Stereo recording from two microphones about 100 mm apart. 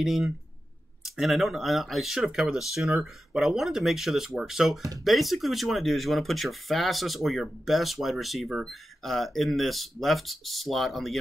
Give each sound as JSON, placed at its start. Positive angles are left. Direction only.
{"t": 0.0, "sound": "speech", "side_deg": 0}